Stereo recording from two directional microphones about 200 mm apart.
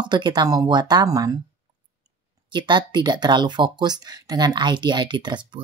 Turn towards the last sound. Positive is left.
turn(degrees=-25)  # may be behind; listen again after turning